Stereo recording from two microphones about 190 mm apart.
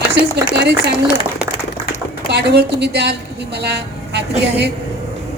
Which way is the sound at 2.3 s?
60° right (ahead or behind).